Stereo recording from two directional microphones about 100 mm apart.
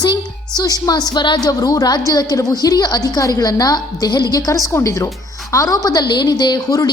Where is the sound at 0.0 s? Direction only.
45° left (ahead or behind).